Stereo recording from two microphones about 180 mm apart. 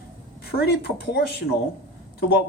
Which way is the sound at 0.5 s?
60° left (ahead or behind).